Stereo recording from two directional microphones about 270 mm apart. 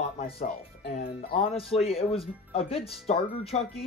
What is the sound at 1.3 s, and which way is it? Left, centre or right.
Speech, left.